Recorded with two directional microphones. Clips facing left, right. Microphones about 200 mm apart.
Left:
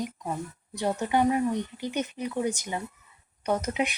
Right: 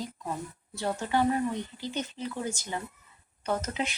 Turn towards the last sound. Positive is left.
turn(degrees=15)  # may be behind; listen again after turning